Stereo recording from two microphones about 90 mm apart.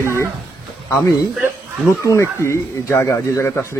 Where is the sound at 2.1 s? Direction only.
30° left (ahead or behind).